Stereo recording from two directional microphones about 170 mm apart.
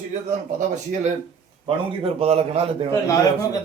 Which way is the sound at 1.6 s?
35° right (ahead or behind).